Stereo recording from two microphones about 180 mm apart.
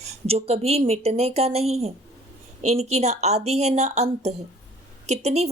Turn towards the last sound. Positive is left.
turn(degrees=-35)  # may be behind; listen again after turning